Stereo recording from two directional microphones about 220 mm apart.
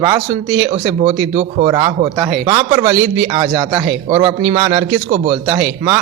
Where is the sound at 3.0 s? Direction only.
60° right (ahead or behind).